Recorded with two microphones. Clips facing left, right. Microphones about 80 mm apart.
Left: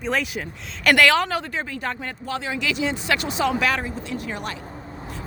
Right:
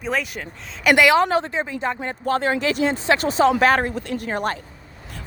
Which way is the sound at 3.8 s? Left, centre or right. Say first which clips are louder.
Right 4 dB; right.